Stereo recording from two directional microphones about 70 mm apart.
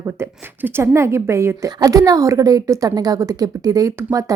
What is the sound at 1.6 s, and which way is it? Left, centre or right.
A woman's voice, right.